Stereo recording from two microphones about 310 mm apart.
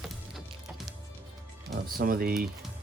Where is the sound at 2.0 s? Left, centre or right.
Right.